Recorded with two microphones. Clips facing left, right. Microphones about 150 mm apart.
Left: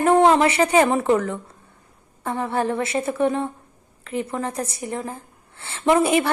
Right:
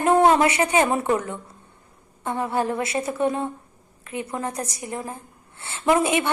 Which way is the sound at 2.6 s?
25° left (ahead or behind).